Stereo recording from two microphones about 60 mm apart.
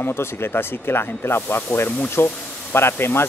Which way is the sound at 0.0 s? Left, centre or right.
Left.